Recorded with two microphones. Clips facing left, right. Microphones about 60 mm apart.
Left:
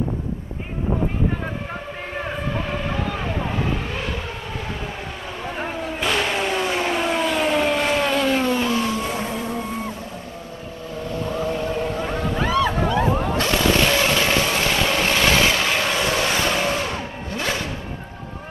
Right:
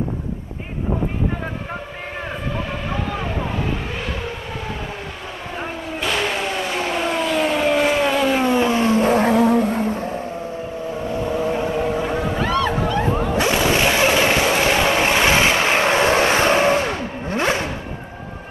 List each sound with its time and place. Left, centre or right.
5.6 s vehicle: centre
8.5 s vehicle: right
9.0 s a sound: right
9.3 s music: right
11.1 s whale vocalization: centre
13.2 s music: centre; by 17.6 s right